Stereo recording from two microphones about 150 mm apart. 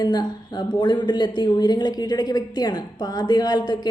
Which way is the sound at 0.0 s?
30° left (ahead or behind).